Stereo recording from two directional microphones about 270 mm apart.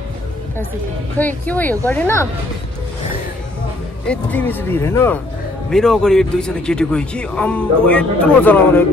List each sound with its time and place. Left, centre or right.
1.1 s speech: centre
4.1 s speech: centre